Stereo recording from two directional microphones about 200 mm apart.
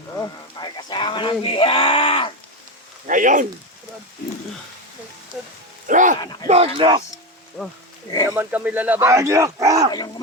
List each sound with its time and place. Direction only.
0.2 s speech: 20° left (ahead or behind)
3.1 s speech: 40° right (ahead or behind)
5.9 s speech: 40° right (ahead or behind)
6.1 s speech: 20° left (ahead or behind)
6.5 s speech: 30° right (ahead or behind)
7.6 s speech: 5° right (ahead or behind)